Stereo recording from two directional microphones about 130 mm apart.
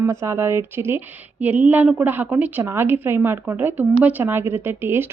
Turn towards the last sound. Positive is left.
turn(degrees=-15)  # may be behind; listen again after turning